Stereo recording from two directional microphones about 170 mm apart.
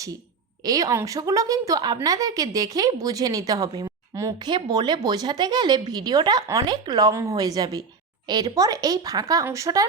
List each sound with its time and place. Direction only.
0.6 s a woman's voice: 20° right (ahead or behind)